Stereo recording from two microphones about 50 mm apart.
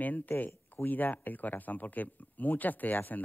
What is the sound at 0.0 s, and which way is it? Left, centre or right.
Speech, left.